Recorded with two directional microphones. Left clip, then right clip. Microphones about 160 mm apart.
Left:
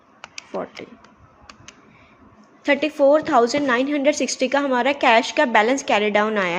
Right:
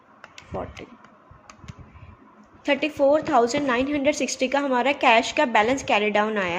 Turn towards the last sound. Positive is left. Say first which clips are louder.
# left 3 dB
turn(degrees=25)  # may be behind; listen again after turning